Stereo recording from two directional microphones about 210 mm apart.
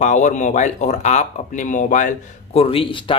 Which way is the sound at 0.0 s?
35° left (ahead or behind).